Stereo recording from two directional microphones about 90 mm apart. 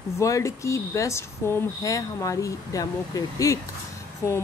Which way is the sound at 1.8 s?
40° left (ahead or behind).